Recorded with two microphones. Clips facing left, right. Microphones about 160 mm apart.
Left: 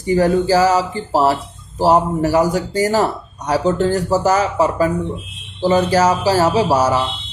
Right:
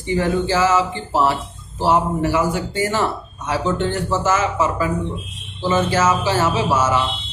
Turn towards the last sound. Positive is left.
turn(degrees=35)  # may be behind; listen again after turning